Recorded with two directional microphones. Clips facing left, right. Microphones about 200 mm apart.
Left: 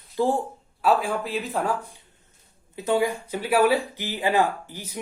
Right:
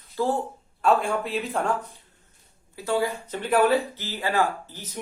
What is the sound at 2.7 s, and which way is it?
Speech, 20° left (ahead or behind).